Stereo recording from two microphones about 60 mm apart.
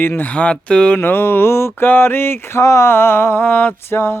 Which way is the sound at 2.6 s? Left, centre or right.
Left.